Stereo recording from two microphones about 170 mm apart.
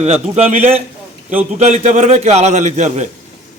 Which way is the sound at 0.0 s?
40° right (ahead or behind).